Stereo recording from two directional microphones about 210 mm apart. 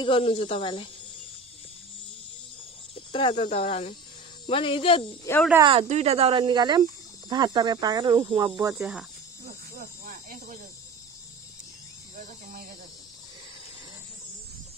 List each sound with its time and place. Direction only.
0.0 s speech: 25° left (ahead or behind)
2.9 s speech: 25° left (ahead or behind)
5.3 s speech: 15° left (ahead or behind)
5.7 s speech: 30° right (ahead or behind); by 9.0 s 10° right (ahead or behind)
9.4 s snake: 40° right (ahead or behind)
12.2 s speech: 45° right (ahead or behind)